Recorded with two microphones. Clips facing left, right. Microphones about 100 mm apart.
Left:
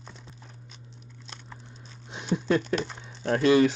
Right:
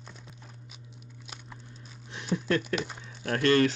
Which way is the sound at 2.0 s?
20° left (ahead or behind).